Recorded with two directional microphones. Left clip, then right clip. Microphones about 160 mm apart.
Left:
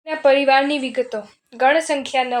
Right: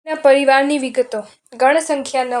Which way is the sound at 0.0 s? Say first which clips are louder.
Right 3 dB; 35° right (ahead or behind).